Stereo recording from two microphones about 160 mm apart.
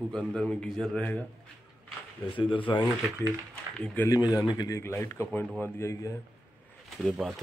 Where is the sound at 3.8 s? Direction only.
10° left (ahead or behind).